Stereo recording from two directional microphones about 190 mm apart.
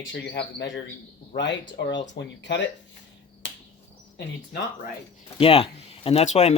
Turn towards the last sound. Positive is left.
turn(degrees=35)  # may be behind; listen again after turning